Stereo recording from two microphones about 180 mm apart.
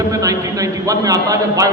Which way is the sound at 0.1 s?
20° right (ahead or behind).